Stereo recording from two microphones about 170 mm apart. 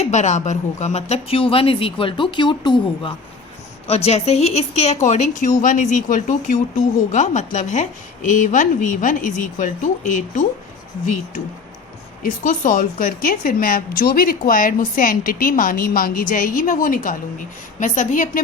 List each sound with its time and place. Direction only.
0.0 s a woman's voice: 45° left (ahead or behind)
12.2 s a woman's voice: 50° left (ahead or behind)